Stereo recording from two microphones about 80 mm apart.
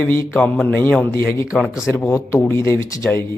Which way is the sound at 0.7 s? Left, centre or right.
Left.